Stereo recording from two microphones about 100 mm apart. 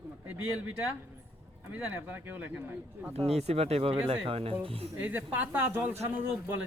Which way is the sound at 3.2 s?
90° right.